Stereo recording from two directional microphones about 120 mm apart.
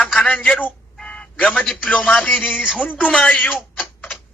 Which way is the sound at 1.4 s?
10° left (ahead or behind).